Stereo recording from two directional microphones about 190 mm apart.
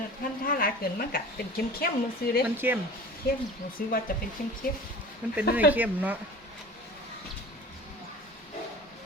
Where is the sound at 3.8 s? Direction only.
50° left (ahead or behind).